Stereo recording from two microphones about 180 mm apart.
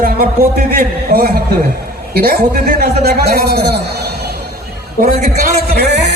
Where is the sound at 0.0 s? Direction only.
55° right (ahead or behind).